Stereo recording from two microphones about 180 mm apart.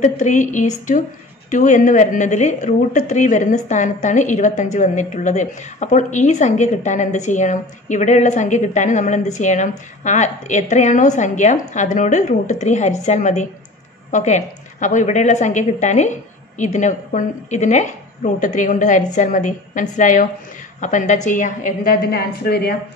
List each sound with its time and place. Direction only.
0.0 s a woman's voice: 45° left (ahead or behind); by 22.8 s 60° left (ahead or behind)